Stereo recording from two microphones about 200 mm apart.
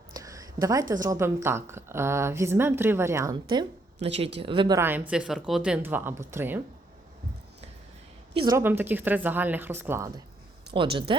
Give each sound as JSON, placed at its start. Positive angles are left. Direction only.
{"t": 0.1, "sound": "speech", "side_deg": -15}
{"t": 4.8, "sound": "speech", "side_deg": -10}
{"t": 8.3, "sound": "a woman's voice", "side_deg": -25}
{"t": 8.5, "sound": "speech", "side_deg": -10}
{"t": 10.8, "sound": "speech", "side_deg": -25}